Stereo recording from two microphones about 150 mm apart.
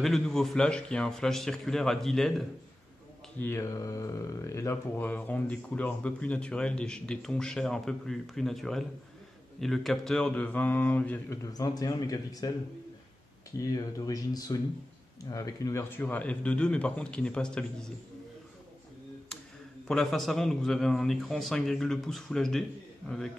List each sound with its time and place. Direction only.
0.0 s a man's voice: centre (ahead or behind)
3.3 s speech: 15° left (ahead or behind)
11.4 s speech: 25° left (ahead or behind)
13.6 s speech: 20° left (ahead or behind); by 17.8 s 5° left (ahead or behind)
19.9 s a man's voice: centre (ahead or behind)